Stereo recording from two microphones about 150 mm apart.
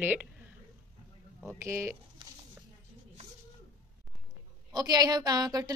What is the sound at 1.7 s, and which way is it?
Speech, 20° right (ahead or behind).